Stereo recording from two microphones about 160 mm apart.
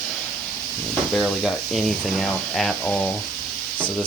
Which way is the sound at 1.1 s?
Centre (ahead or behind).